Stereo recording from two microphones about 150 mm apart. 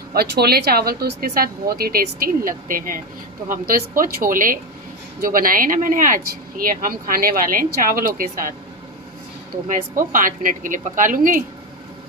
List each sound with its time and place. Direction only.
0.1 s a woman's voice: 90° right; by 8.5 s 65° right (ahead or behind)
9.7 s a woman's voice: 60° right (ahead or behind)